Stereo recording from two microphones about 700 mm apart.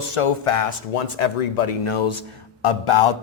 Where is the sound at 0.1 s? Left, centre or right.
Left.